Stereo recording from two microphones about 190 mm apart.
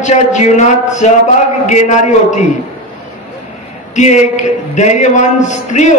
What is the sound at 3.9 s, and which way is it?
A man's voice, 40° left (ahead or behind).